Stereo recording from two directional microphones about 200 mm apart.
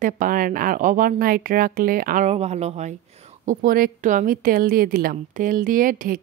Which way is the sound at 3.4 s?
45° right (ahead or behind).